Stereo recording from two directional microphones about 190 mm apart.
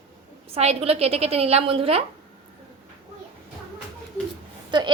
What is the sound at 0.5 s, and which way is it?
A woman's voice, 35° right (ahead or behind).